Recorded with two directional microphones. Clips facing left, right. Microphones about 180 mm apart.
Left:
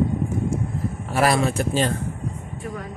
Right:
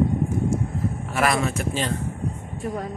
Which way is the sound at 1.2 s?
35° left (ahead or behind).